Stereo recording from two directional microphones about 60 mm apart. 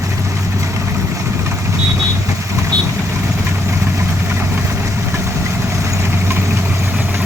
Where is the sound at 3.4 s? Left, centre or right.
Right.